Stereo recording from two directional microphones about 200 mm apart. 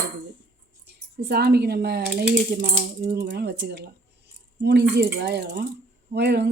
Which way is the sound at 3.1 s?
55° right (ahead or behind).